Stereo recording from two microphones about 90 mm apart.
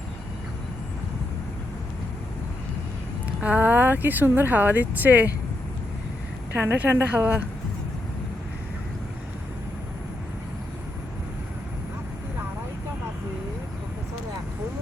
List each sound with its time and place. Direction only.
3.4 s speech: 20° right (ahead or behind)
6.5 s speech: 20° right (ahead or behind)